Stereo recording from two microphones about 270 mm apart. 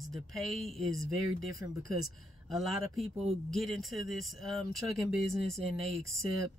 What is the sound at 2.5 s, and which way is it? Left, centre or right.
Speech, centre.